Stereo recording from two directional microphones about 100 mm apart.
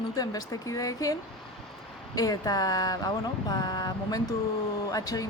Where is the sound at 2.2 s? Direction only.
40° left (ahead or behind).